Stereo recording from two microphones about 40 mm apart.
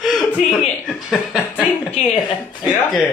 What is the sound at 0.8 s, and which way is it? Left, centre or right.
Speech, centre.